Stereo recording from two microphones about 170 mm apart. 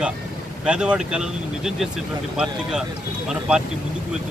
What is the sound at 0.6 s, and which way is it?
Speech, 5° right (ahead or behind).